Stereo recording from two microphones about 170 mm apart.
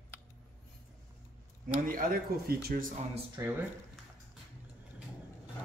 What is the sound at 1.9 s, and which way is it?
Speech, 60° right (ahead or behind).